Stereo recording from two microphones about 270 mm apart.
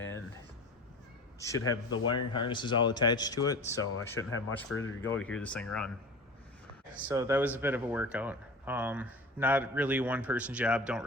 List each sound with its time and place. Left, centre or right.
1.4 s speech: centre
4.3 s speech: left
5.0 s speech: centre
7.1 s speech: centre